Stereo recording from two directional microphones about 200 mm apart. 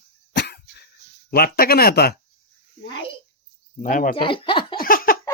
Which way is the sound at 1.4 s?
50° left (ahead or behind).